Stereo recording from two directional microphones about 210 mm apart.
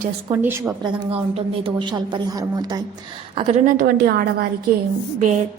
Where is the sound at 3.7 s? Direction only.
45° right (ahead or behind).